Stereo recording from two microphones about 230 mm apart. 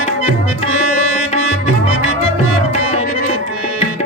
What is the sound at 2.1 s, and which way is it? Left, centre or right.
Tabla, right.